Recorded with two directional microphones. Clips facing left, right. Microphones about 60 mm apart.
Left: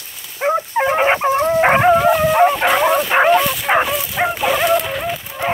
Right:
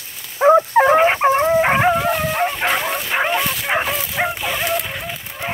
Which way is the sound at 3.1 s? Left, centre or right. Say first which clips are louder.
Left 4 dB; left.